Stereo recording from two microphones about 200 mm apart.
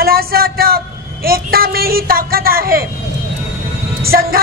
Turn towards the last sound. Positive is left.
turn(degrees=-50)  # may be behind; listen again after turning